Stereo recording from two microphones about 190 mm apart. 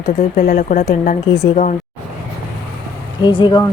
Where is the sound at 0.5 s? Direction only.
40° left (ahead or behind).